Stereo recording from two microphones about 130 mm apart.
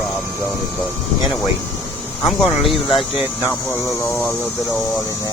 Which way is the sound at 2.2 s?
Centre (ahead or behind).